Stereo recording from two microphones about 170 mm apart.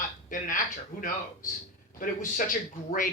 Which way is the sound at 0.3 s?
50° left (ahead or behind).